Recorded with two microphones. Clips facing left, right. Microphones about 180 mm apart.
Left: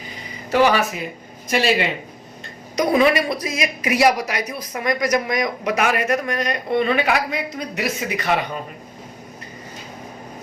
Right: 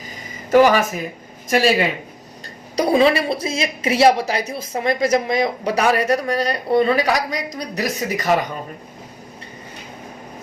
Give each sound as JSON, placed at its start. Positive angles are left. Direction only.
{"t": 0.5, "sound": "speech", "side_deg": -45}
{"t": 2.7, "sound": "a woman's voice", "side_deg": -30}